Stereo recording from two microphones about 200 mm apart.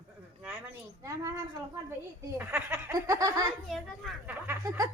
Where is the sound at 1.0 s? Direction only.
15° right (ahead or behind).